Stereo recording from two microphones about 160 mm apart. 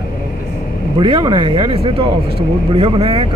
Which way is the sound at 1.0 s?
30° right (ahead or behind).